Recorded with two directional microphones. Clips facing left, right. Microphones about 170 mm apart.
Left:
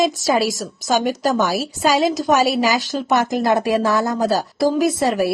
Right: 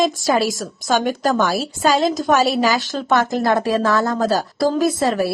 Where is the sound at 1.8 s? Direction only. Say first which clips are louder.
Even; 10° left (ahead or behind).